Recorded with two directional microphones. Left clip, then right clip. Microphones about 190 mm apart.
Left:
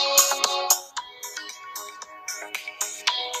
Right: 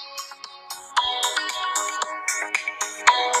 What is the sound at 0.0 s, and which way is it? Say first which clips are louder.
Music: left 15 dB; 55° left (ahead or behind).